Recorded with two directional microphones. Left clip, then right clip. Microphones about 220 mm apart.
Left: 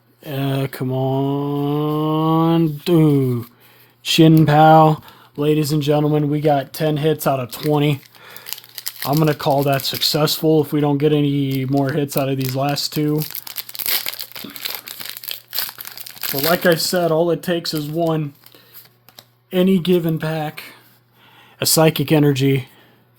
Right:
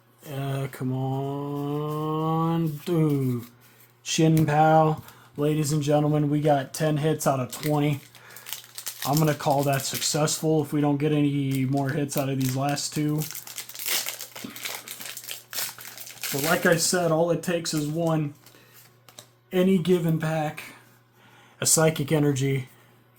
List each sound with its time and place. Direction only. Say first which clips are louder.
0.3 s speech: left 9 dB; 45° left (ahead or behind)
7.7 s a sound: left 8 dB; 50° left (ahead or behind)
8.7 s crumpling: left 7 dB; 20° left (ahead or behind)
9.0 s speech: left 6 dB; 40° left (ahead or behind)
13.8 s crumpling: left 5 dB; 40° left (ahead or behind)
16.4 s speech: left 6 dB; 45° left (ahead or behind)
19.5 s speech: left 5 dB; 45° left (ahead or behind)